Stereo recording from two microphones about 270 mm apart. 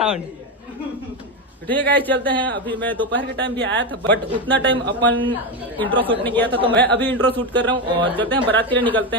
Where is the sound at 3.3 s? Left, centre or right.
Right.